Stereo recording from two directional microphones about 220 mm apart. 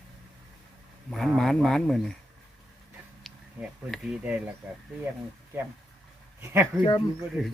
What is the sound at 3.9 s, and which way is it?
Speech, 5° right (ahead or behind).